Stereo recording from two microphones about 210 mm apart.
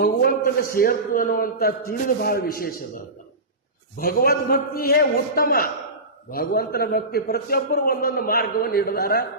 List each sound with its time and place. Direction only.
0.0 s a man's voice: 45° left (ahead or behind)
3.9 s a man's voice: 45° left (ahead or behind)